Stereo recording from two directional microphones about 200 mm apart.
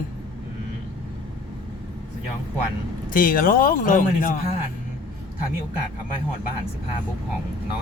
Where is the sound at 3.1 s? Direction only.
45° left (ahead or behind).